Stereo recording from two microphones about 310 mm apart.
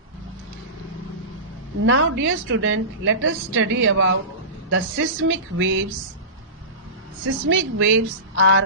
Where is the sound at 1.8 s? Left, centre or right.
Right.